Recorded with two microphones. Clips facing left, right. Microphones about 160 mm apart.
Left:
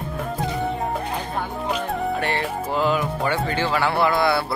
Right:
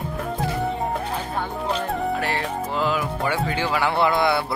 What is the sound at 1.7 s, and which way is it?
Speech, centre (ahead or behind).